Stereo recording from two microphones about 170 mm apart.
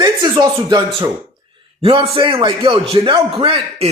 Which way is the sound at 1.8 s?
30° right (ahead or behind).